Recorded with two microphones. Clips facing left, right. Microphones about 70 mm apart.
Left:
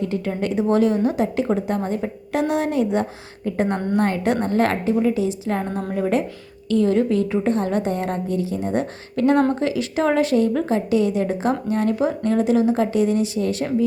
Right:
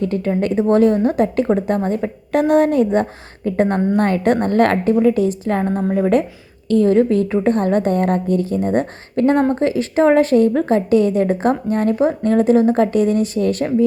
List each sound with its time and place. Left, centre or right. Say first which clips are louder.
0.0 s a woman's voice: right 5 dB; right